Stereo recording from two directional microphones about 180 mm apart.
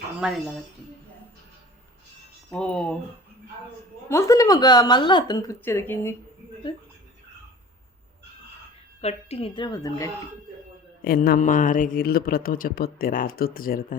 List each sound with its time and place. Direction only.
0.2 s speech: 5° right (ahead or behind)
2.5 s speech: 5° left (ahead or behind)
4.1 s speech: 15° left (ahead or behind)
9.0 s a woman's voice: 35° left (ahead or behind)
9.6 s speech: 20° left (ahead or behind)
11.0 s speech: 55° left (ahead or behind)